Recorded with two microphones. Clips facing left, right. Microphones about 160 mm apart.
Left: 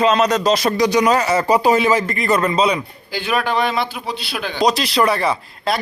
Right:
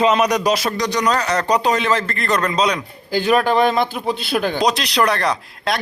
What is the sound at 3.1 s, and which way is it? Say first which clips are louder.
Speech: right 4 dB; 40° right (ahead or behind).